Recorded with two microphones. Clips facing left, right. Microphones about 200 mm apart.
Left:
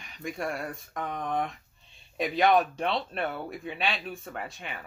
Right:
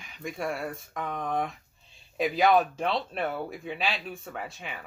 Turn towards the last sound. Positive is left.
turn(degrees=0)  # may be behind; listen again after turning